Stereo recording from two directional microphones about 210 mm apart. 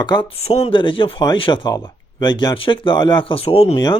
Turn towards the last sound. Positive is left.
turn(degrees=20)  # may be behind; listen again after turning